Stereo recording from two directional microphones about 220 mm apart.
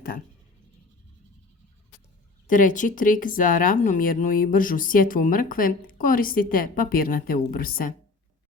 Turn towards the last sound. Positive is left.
turn(degrees=40)  # may be behind; listen again after turning